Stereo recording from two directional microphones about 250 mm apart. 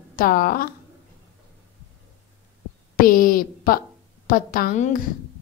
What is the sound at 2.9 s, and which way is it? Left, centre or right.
A woman's voice, left.